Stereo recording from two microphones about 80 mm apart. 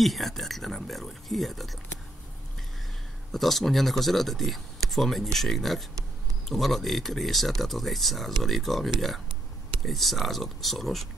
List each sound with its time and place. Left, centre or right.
0.0 s speech: centre
3.3 s speech: centre